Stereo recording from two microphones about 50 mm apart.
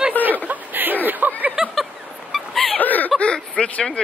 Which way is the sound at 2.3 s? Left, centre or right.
Centre.